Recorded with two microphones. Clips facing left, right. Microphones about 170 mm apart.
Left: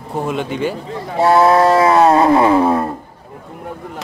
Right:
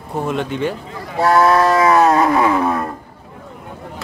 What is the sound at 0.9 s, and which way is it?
Speech, 25° left (ahead or behind).